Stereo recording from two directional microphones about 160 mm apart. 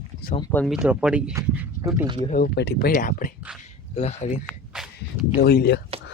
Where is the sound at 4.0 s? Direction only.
45° left (ahead or behind).